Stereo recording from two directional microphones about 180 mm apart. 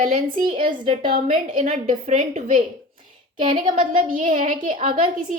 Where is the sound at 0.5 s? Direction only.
30° right (ahead or behind).